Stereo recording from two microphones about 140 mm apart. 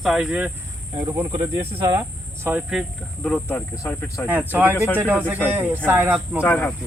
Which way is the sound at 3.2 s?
10° left (ahead or behind).